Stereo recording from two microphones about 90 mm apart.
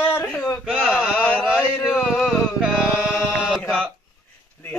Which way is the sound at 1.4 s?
5° right (ahead or behind).